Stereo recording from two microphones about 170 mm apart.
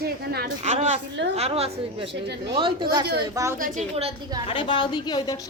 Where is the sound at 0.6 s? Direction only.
40° right (ahead or behind); by 3.6 s 20° right (ahead or behind).